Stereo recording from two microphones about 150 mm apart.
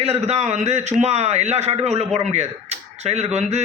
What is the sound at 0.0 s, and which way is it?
A man's voice, 45° right (ahead or behind).